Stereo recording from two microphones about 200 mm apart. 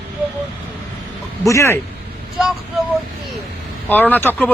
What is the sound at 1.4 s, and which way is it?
Speech, 15° left (ahead or behind).